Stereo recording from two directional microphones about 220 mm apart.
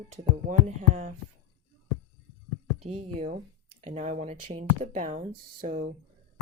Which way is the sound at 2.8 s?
30° right (ahead or behind).